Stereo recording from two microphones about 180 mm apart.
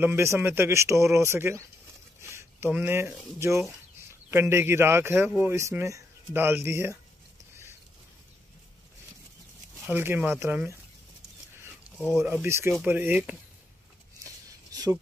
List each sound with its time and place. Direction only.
0.0 s speech: 15° right (ahead or behind)
9.8 s speech: 10° right (ahead or behind)
12.2 s speech: 10° right (ahead or behind)
14.2 s a sound: 20° right (ahead or behind)